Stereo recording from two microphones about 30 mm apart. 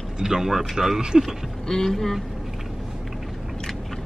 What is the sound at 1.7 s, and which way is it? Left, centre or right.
Speech, centre.